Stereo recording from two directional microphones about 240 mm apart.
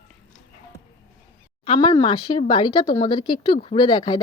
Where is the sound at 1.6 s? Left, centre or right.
Centre.